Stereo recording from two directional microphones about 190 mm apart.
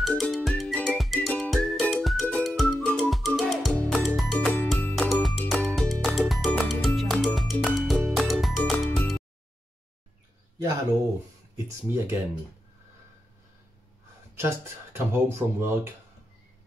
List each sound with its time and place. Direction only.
0.0 s music: centre (ahead or behind)
11.5 s speech: 10° right (ahead or behind)
14.3 s speech: 15° right (ahead or behind)